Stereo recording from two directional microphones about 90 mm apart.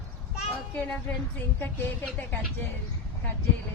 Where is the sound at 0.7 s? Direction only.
15° left (ahead or behind).